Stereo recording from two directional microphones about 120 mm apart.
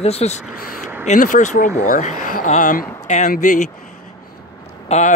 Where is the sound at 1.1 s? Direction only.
90° left.